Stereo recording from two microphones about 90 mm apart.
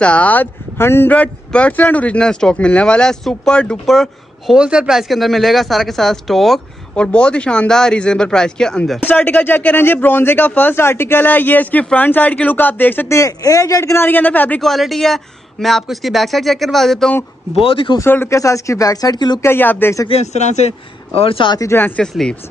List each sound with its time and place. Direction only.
0.0 s speech: 15° left (ahead or behind)
1.1 s speech: 15° left (ahead or behind)
4.6 s speech: 10° right (ahead or behind)
7.0 s speech: 10° left (ahead or behind)
9.0 s speech: 20° left (ahead or behind)
13.1 s speech: 40° left (ahead or behind); by 14.6 s 20° left (ahead or behind)
14.6 s speech: centre (ahead or behind)
17.6 s speech: 90° left
18.3 s speech: 35° left (ahead or behind); by 19.4 s 50° left (ahead or behind)
19.4 s speech: 25° left (ahead or behind)
20.1 s speech: 90° left
21.5 s speech: 35° left (ahead or behind)
22.0 s speech: 5° left (ahead or behind)